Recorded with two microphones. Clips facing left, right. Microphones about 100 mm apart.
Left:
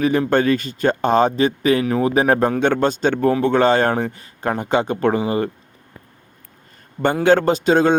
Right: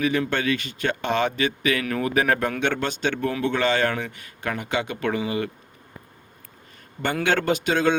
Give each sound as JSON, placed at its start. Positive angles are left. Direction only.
{"t": 0.0, "sound": "speech", "side_deg": 35}
{"t": 7.0, "sound": "speech", "side_deg": 35}